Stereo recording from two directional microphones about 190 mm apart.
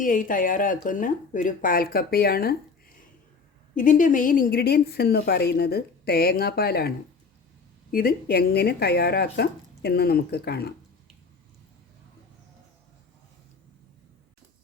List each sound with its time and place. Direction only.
0.0 s speech: 45° left (ahead or behind)
3.8 s a woman's voice: 45° left (ahead or behind); by 10.8 s 60° left (ahead or behind)